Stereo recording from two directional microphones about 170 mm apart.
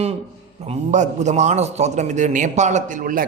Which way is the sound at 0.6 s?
40° right (ahead or behind).